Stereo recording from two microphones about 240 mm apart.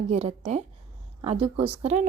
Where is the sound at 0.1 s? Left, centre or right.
Right.